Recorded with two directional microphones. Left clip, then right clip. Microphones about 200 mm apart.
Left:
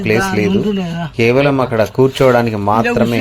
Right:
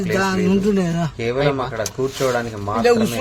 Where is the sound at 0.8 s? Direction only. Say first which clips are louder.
Right 1 dB; 55° right (ahead or behind).